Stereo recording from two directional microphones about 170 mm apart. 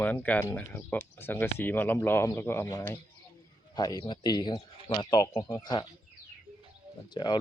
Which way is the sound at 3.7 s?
20° left (ahead or behind).